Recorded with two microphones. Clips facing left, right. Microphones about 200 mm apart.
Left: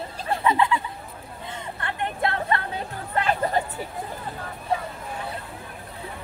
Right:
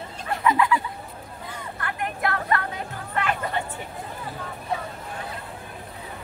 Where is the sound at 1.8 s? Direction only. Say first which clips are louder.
Left 1 dB; 30° left (ahead or behind).